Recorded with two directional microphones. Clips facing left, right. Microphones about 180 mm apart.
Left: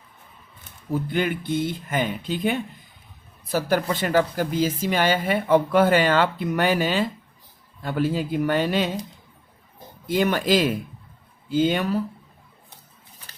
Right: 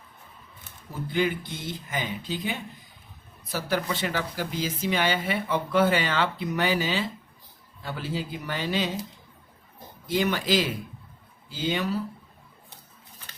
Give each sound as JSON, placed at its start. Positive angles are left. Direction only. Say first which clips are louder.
{"t": 1.1, "sound": "speech", "louder": "left 1 dB", "side_deg": 55}
{"t": 10.1, "sound": "speech", "louder": "left 4 dB", "side_deg": 50}